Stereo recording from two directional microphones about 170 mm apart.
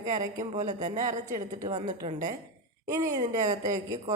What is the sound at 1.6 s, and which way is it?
A woman's voice, 25° right (ahead or behind).